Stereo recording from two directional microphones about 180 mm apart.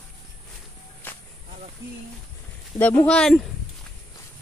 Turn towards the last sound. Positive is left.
turn(degrees=5)  # may be behind; listen again after turning